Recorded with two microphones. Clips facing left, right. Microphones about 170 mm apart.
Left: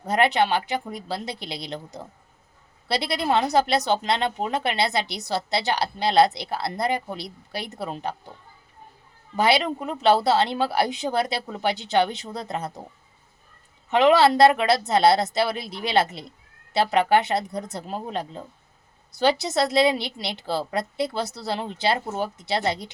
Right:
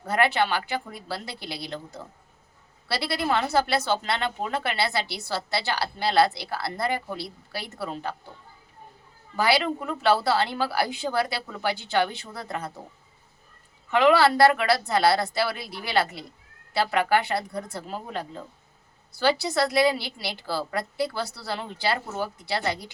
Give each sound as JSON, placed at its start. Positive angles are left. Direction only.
{"t": 0.0, "sound": "speech", "side_deg": 20}
{"t": 9.3, "sound": "speech", "side_deg": 20}
{"t": 13.9, "sound": "speech", "side_deg": 20}